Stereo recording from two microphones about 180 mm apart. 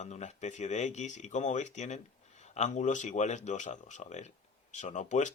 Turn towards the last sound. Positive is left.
turn(degrees=40)  # may be behind; listen again after turning